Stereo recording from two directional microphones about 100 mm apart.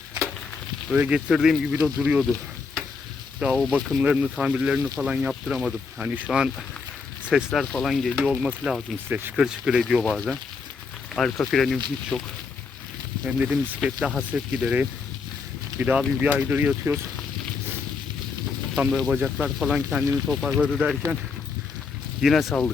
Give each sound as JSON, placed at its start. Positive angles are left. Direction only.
{"t": 0.9, "sound": "speech", "side_deg": -10}
{"t": 3.4, "sound": "speech", "side_deg": 0}
{"t": 4.0, "sound": "speech", "side_deg": -10}
{"t": 7.6, "sound": "speech", "side_deg": 5}
{"t": 9.0, "sound": "speech", "side_deg": -20}
{"t": 9.3, "sound": "speech", "side_deg": -5}
{"t": 13.2, "sound": "speech", "side_deg": -10}
{"t": 15.8, "sound": "speech", "side_deg": -15}
{"t": 18.9, "sound": "speech", "side_deg": 0}
{"t": 19.1, "sound": "speech", "side_deg": -15}
{"t": 19.5, "sound": "speech", "side_deg": 0}
{"t": 19.7, "sound": "speech", "side_deg": -10}
{"t": 22.2, "sound": "speech", "side_deg": 0}